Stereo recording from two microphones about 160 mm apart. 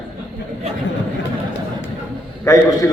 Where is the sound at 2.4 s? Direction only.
20° left (ahead or behind).